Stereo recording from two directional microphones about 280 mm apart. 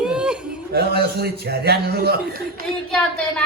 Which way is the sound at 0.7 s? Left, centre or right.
Right.